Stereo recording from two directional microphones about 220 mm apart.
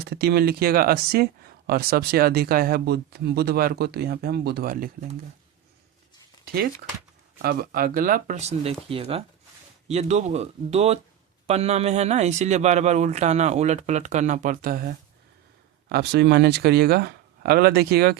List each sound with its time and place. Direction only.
0.0 s speech: 45° right (ahead or behind)
6.4 s a sound: 45° right (ahead or behind)
7.4 s speech: 45° right (ahead or behind)